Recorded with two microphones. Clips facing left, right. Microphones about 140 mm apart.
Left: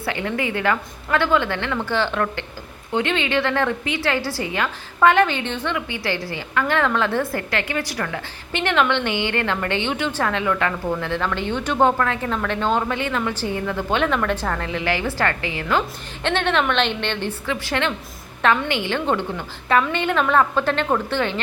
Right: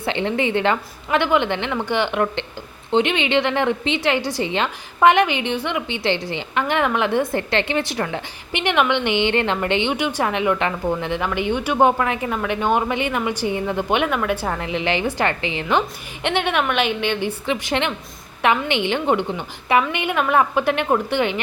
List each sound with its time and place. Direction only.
0.0 s a woman's voice: 25° right (ahead or behind)